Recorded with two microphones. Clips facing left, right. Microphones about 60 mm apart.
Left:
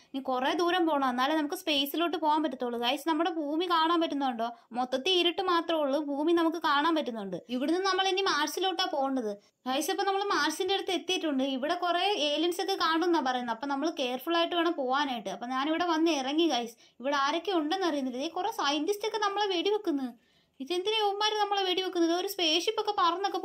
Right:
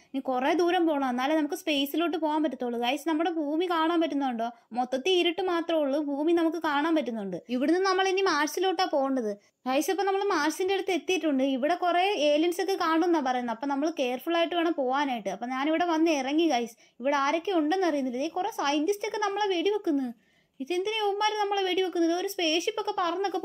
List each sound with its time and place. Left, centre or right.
0.1 s speech: right
0.7 s a woman's voice: centre
3.6 s a woman's voice: right
7.5 s a woman's voice: right; by 23.4 s centre